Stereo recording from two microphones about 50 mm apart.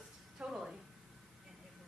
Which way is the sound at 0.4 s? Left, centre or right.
Centre.